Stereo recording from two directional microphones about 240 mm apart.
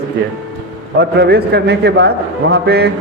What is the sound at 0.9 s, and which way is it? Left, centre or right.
A man's voice, right.